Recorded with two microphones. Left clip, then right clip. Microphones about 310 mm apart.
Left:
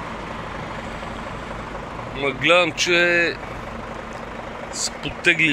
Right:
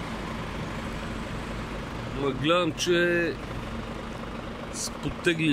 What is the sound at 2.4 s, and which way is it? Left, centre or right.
Speech, centre.